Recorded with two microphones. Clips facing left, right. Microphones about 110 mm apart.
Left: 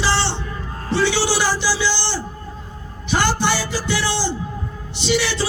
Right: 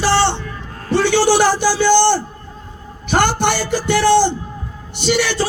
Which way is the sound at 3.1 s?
55° right (ahead or behind).